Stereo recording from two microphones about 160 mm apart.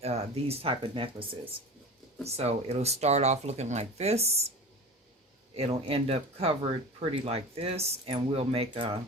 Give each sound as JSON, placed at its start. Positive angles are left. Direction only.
{"t": 0.0, "sound": "speech", "side_deg": -40}
{"t": 5.5, "sound": "speech", "side_deg": -40}